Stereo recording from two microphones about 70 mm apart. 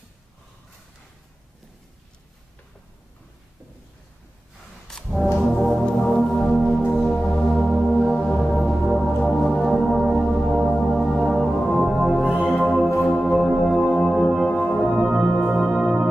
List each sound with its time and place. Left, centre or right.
5.5 s music: centre
13.0 s singing bowl: centre
13.6 s music: centre
14.5 s music: centre
15.0 s music: centre